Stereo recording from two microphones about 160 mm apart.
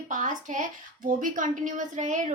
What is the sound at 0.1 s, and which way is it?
A woman's voice, 55° right (ahead or behind).